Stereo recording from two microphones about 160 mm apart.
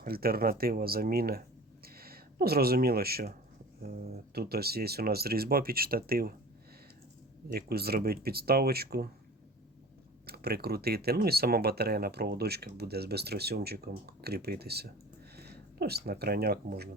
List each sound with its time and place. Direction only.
0.0 s speech: 70° right (ahead or behind)
7.5 s speech: 75° right (ahead or behind)
10.2 s speech: 75° right (ahead or behind)